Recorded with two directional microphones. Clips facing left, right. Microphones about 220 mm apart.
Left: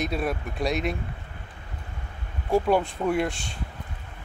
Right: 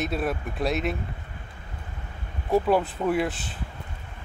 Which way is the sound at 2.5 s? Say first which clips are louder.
Even; centre (ahead or behind).